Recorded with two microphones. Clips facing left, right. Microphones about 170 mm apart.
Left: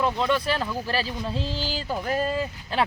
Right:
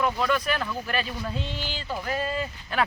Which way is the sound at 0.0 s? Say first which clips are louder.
Left 1 dB; 25° left (ahead or behind).